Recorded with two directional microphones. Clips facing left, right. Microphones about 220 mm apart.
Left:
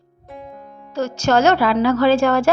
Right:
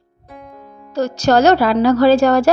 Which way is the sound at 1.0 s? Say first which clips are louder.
Right 3 dB; 35° right (ahead or behind).